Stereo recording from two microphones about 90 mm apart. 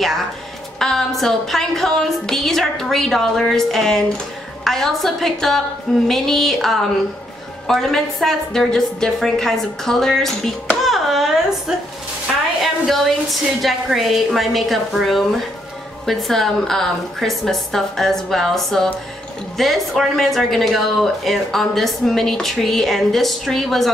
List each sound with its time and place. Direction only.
0.7 s speech: 5° left (ahead or behind)
10.8 s a sound: centre (ahead or behind)
13.6 s speech: centre (ahead or behind)